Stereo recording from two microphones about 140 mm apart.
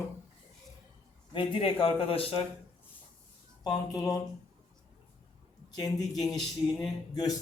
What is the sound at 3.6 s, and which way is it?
Speech, 30° left (ahead or behind).